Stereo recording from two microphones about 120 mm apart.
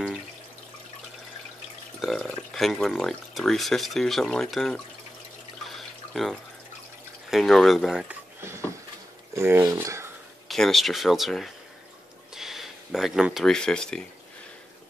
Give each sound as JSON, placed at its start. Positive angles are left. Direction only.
{"t": 2.0, "sound": "speech", "side_deg": 0}
{"t": 5.7, "sound": "water", "side_deg": 0}
{"t": 7.2, "sound": "speech", "side_deg": 0}
{"t": 8.4, "sound": "a sound", "side_deg": -20}
{"t": 9.3, "sound": "speech", "side_deg": -20}
{"t": 10.5, "sound": "speech", "side_deg": 0}